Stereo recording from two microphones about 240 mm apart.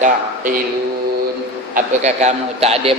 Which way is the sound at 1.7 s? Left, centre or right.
Right.